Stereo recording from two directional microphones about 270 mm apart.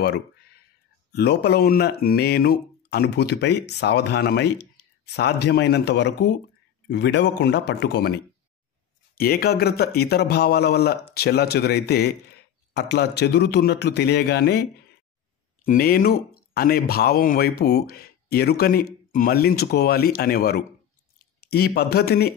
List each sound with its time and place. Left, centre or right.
1.1 s speech: left